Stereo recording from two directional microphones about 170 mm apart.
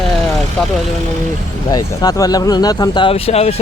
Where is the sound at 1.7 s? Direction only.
20° left (ahead or behind); by 3.5 s 35° left (ahead or behind).